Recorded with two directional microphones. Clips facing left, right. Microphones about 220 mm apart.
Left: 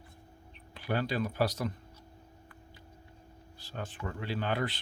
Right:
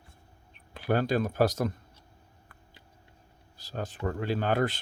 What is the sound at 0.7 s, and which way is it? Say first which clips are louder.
Speech: right 6 dB; 45° right (ahead or behind).